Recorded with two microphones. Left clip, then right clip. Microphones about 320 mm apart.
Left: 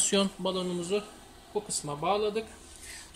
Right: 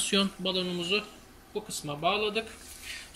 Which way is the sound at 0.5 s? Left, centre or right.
Left.